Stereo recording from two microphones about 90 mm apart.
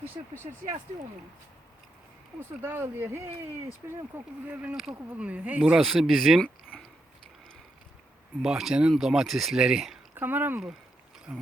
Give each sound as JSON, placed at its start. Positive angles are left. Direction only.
{"t": 0.0, "sound": "speech", "side_deg": -25}
{"t": 2.6, "sound": "speech", "side_deg": -25}
{"t": 4.4, "sound": "speech", "side_deg": -20}
{"t": 4.7, "sound": "speech", "side_deg": -5}
{"t": 5.8, "sound": "speech", "side_deg": 0}
{"t": 8.4, "sound": "speech", "side_deg": -5}
{"t": 10.2, "sound": "speech", "side_deg": -20}